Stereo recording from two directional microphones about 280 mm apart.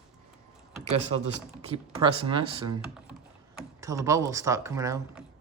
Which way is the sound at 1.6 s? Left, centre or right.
Centre.